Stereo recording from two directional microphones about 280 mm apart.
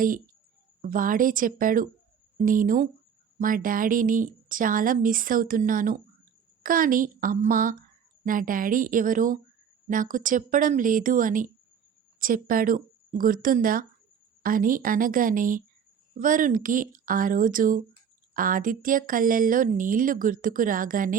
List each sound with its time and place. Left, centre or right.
0.8 s a woman's voice: right